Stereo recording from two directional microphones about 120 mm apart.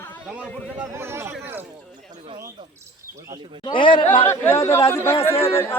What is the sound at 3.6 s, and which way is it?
Speech, 40° left (ahead or behind).